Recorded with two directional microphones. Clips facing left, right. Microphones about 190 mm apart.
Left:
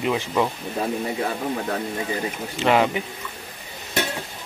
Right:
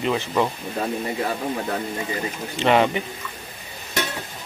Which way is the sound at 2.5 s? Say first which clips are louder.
Right 1 dB; 5° left (ahead or behind).